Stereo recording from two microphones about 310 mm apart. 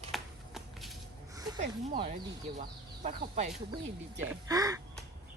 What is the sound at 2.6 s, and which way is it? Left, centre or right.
Speech, right.